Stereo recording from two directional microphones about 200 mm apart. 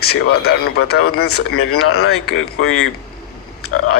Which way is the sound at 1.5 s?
90° left.